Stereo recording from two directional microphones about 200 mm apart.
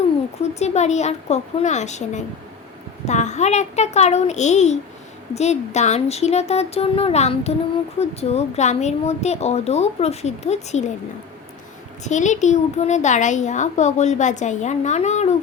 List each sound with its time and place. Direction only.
0.6 s a woman's voice: 35° left (ahead or behind)
12.0 s a woman's voice: 35° left (ahead or behind)